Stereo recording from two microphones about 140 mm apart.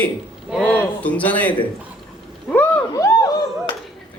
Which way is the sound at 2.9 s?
25° left (ahead or behind).